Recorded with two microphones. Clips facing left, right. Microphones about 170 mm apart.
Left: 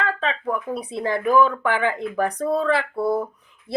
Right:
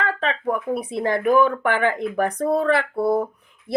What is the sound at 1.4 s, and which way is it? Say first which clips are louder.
Speech: even; 50° right (ahead or behind).